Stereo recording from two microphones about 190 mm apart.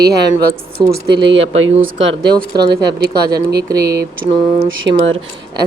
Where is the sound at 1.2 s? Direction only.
80° right.